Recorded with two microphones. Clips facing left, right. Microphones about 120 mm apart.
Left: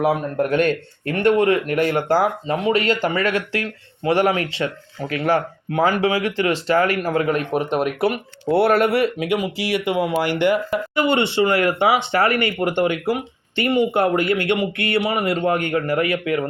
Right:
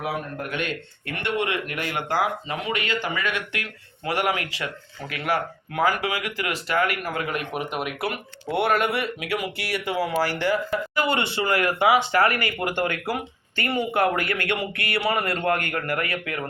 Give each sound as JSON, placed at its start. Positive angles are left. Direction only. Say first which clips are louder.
{"t": 0.0, "sound": "speech", "louder": "left 10 dB", "side_deg": 40}
{"t": 9.1, "sound": "speech", "louder": "left 7 dB", "side_deg": 25}
{"t": 9.8, "sound": "speech", "louder": "left 3 dB", "side_deg": 55}
{"t": 10.2, "sound": "speech", "louder": "left 5 dB", "side_deg": 20}